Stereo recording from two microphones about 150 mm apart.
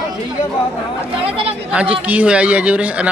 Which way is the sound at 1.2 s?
40° right (ahead or behind).